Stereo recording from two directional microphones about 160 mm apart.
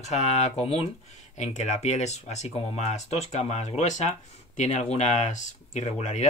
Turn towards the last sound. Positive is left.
turn(degrees=50)  # may be behind; listen again after turning